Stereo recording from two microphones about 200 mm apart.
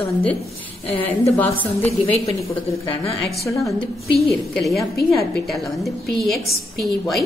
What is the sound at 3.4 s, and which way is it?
Speech, 15° left (ahead or behind).